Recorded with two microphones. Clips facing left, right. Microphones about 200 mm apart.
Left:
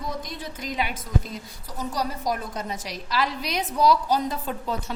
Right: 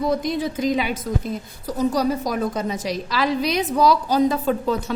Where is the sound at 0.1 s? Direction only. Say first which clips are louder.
Right 12 dB; 85° right.